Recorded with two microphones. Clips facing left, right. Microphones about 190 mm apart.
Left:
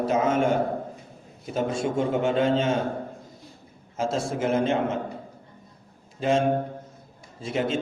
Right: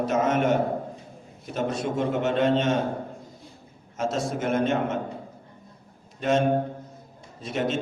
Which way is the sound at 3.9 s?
30° left (ahead or behind).